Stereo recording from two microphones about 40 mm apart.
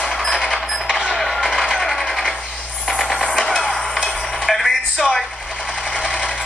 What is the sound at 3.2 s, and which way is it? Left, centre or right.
Music, left.